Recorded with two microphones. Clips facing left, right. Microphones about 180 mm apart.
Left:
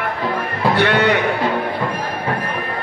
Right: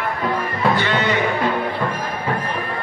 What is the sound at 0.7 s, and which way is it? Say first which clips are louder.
Speech: left 7 dB; 65° left (ahead or behind).